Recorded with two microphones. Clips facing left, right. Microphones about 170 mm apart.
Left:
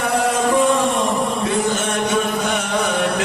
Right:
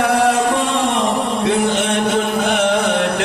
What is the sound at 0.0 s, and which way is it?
Music, 70° right (ahead or behind).